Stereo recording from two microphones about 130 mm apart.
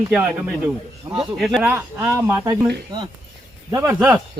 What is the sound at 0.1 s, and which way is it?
Speech, 5° right (ahead or behind).